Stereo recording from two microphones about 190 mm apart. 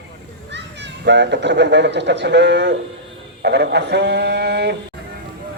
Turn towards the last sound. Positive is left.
turn(degrees=-60)  # may be behind; listen again after turning